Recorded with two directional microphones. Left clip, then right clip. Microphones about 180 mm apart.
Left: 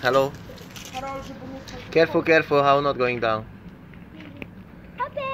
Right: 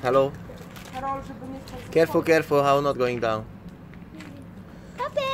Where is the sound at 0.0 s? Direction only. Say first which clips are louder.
Left 1 dB; centre (ahead or behind).